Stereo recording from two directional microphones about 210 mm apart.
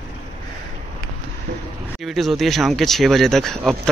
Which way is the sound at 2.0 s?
Centre (ahead or behind).